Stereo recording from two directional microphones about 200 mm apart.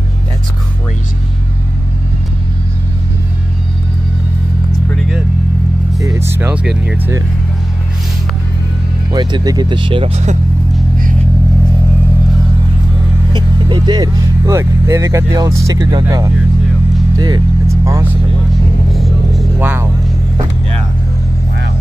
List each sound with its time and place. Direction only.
5.9 s speech: 15° right (ahead or behind)
9.1 s speech: 20° right (ahead or behind)
13.3 s speech: 25° right (ahead or behind)
17.2 s vehicle: 20° right (ahead or behind)
18.9 s music: centre (ahead or behind)